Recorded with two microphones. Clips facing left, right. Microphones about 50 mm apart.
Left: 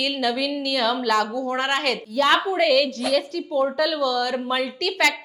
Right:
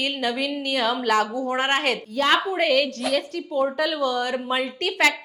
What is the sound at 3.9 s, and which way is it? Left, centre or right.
A woman's voice, right.